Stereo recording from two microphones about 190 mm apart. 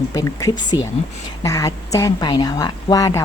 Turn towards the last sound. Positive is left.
turn(degrees=20)  # may be behind; listen again after turning